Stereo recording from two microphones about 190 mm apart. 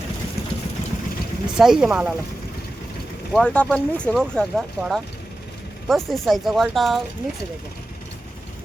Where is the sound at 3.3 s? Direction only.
5° left (ahead or behind).